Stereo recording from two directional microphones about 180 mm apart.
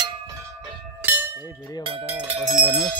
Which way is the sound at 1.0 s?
10° right (ahead or behind).